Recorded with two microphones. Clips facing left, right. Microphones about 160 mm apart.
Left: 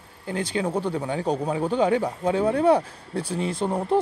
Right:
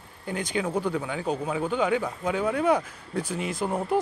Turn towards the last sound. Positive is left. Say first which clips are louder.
# left 3 dB
turn(degrees=30)  # may be behind; listen again after turning